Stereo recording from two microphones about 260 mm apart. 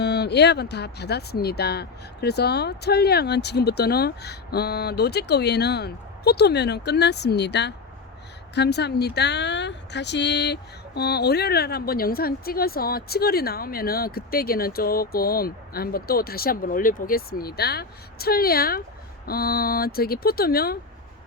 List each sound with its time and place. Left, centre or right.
0.0 s speech: left